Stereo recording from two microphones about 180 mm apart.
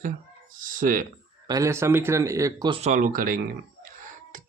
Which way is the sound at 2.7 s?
40° right (ahead or behind).